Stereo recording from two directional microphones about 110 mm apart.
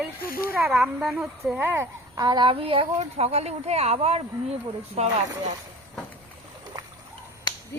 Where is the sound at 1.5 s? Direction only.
20° right (ahead or behind).